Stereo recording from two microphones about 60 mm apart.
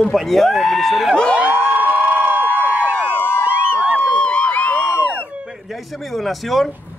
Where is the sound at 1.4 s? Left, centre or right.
Right.